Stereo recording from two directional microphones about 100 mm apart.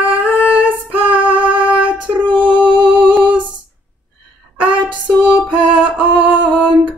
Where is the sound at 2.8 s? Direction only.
55° right (ahead or behind).